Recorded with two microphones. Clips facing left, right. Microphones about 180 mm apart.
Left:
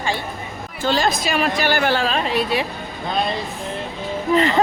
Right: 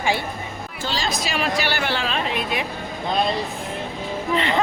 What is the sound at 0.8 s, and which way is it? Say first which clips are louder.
A woman's voice: left 7 dB; 55° left (ahead or behind).